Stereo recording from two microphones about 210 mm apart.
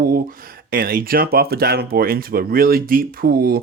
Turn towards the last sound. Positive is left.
turn(degrees=-45)  # may be behind; listen again after turning